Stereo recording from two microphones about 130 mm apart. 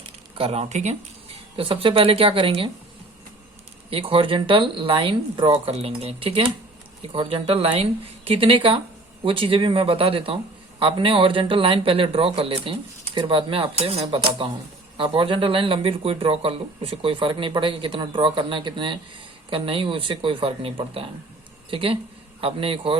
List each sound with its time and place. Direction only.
0.3 s speech: 45° right (ahead or behind); by 1.4 s 60° right (ahead or behind)
1.5 s a man's voice: 45° right (ahead or behind)
3.8 s a man's voice: 45° right (ahead or behind)